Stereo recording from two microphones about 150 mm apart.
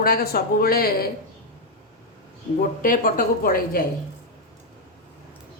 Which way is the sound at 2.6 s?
70° left (ahead or behind).